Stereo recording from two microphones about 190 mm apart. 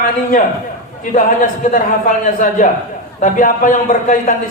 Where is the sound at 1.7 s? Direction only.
45° left (ahead or behind).